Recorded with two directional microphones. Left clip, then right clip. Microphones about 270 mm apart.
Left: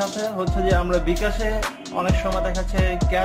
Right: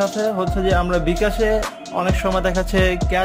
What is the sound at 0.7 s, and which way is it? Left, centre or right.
Music, right.